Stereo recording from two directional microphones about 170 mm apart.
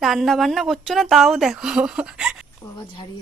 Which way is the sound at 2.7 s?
25° left (ahead or behind).